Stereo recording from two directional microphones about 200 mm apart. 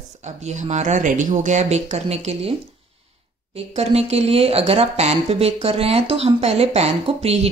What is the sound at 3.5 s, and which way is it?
Speech, 30° right (ahead or behind).